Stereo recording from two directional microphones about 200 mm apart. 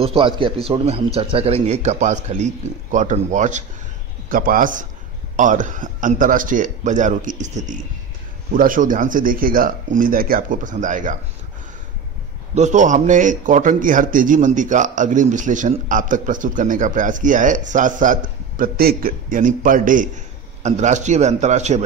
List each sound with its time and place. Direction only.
0.0 s a man's voice: 25° right (ahead or behind)
12.5 s a man's voice: 35° right (ahead or behind)